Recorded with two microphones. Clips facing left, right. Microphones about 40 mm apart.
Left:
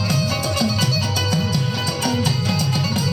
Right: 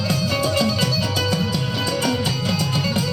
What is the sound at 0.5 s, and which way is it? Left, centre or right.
Music, centre.